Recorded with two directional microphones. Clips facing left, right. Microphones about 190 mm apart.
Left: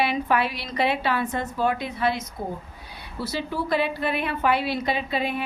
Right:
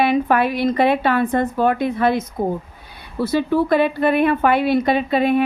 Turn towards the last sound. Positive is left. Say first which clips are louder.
# right 10 dB
turn(degrees=-55)  # may be behind; listen again after turning